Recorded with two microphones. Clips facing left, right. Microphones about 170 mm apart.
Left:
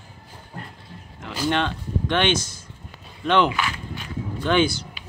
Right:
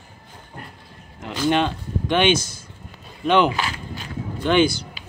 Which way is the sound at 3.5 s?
35° right (ahead or behind).